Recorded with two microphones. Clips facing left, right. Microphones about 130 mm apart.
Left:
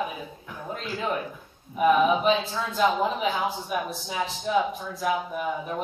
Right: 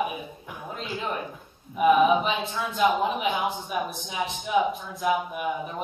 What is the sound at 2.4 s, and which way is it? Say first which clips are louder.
A man's voice: even; 15° right (ahead or behind).